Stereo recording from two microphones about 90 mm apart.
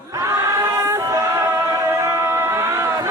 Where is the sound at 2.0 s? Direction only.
30° right (ahead or behind).